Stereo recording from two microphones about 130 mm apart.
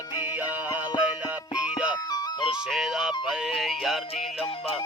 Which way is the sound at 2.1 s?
30° left (ahead or behind).